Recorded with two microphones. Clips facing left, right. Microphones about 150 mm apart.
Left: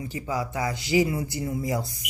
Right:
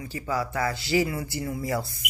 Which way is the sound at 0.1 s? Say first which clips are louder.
Right 2 dB; 20° left (ahead or behind).